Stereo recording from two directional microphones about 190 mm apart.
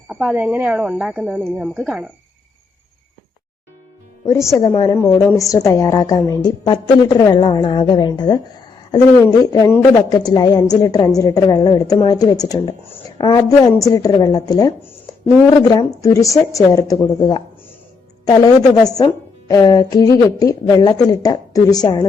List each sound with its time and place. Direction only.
0.1 s a woman's voice: 5° right (ahead or behind)
4.5 s a woman's voice: 20° left (ahead or behind)
15.7 s a woman's voice: 20° left (ahead or behind)